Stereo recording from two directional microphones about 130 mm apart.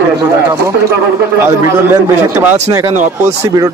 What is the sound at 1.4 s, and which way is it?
A man's voice, 20° right (ahead or behind).